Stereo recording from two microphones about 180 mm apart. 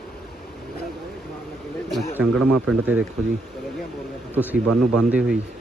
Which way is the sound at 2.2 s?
5° right (ahead or behind).